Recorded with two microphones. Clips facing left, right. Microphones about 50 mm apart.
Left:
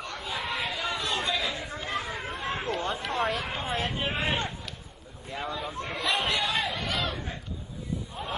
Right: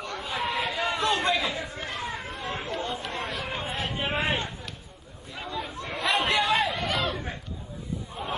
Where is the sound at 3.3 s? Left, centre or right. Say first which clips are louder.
Even; centre.